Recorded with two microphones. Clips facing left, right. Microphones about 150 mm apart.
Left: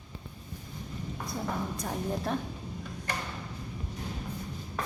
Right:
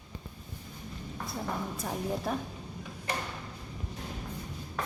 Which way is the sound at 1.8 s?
5° right (ahead or behind).